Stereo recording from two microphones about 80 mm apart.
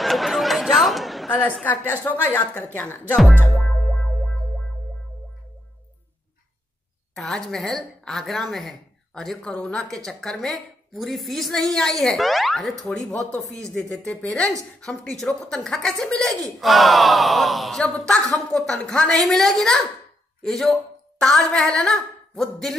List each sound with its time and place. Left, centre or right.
0.0 s chatter: centre
1.6 s a woman's voice: left
7.2 s a woman's voice: centre